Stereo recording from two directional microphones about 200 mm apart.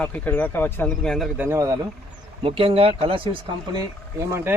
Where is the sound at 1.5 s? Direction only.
15° right (ahead or behind).